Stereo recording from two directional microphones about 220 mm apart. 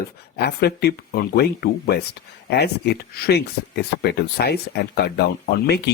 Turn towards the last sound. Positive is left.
turn(degrees=45)  # may be behind; listen again after turning